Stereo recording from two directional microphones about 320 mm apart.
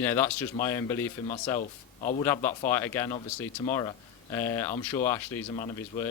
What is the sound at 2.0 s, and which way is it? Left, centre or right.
Speech, left.